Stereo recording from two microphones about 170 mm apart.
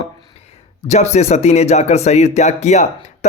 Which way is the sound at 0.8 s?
40° left (ahead or behind).